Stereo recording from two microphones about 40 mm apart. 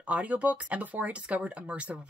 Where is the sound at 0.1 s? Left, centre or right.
Right.